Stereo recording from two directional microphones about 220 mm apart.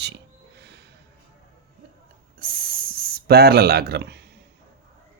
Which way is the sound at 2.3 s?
40° right (ahead or behind).